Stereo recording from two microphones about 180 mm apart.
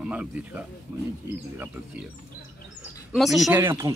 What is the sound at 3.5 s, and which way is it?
Speech, 15° right (ahead or behind).